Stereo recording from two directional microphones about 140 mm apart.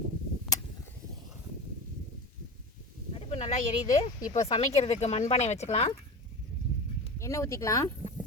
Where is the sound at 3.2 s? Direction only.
45° left (ahead or behind).